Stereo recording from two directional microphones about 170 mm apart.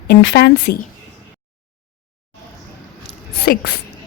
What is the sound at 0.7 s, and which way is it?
Speech, 70° left (ahead or behind).